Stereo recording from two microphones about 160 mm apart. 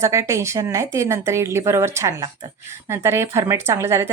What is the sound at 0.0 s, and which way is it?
Speech, 20° right (ahead or behind).